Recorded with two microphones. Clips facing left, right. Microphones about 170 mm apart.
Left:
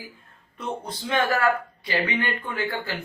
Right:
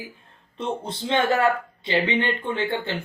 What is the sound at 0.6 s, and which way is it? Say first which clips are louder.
Speech: right 3 dB; 25° right (ahead or behind).